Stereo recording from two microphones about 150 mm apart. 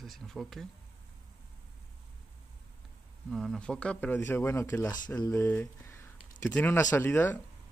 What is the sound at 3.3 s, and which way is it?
Speech, centre (ahead or behind).